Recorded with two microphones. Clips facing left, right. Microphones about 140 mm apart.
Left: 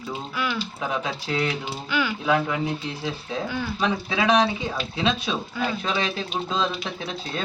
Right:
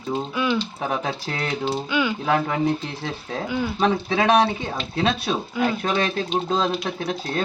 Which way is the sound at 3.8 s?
50° right (ahead or behind).